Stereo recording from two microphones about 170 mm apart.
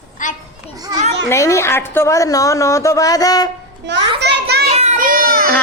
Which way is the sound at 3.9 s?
85° right.